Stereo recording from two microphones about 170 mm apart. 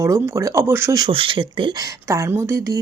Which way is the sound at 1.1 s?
30° right (ahead or behind).